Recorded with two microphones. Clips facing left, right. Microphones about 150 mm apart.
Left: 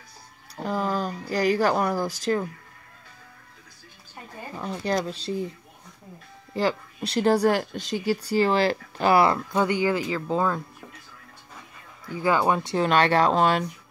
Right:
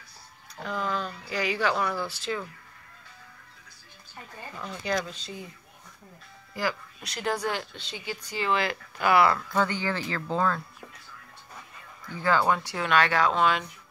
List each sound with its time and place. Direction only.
0.6 s speech: 35° left (ahead or behind)
4.6 s speech: 35° left (ahead or behind)
6.5 s speech: 30° left (ahead or behind)
9.5 s speech: 15° left (ahead or behind)
12.2 s speech: 15° left (ahead or behind); by 13.7 s 40° left (ahead or behind)